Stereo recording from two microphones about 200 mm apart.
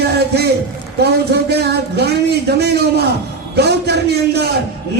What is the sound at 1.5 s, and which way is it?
A man's voice, 55° right (ahead or behind).